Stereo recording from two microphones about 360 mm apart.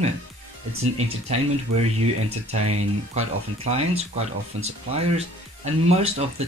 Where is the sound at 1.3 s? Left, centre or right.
Centre.